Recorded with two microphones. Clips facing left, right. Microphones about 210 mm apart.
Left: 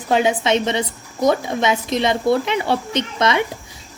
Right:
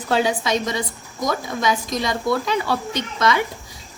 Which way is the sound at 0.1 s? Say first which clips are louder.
Left 3 dB; 20° left (ahead or behind).